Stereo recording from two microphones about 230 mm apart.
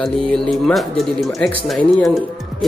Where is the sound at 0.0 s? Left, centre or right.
Centre.